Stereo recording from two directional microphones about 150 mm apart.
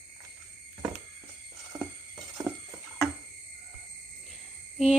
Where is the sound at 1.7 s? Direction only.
25° right (ahead or behind).